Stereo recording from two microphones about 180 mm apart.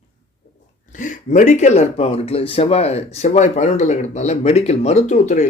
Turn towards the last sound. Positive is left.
turn(degrees=40)  # may be behind; listen again after turning